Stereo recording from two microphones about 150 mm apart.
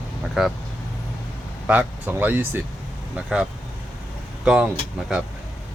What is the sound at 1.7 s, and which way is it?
A man's voice, 10° right (ahead or behind).